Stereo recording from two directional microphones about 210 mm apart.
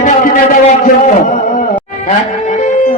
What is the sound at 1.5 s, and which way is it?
Music, 40° left (ahead or behind).